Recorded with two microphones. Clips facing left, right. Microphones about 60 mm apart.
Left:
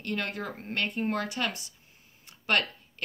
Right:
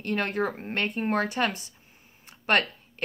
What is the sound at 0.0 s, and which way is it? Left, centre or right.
Speech, right.